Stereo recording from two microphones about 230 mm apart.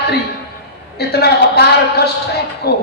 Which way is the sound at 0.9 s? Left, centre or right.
Left.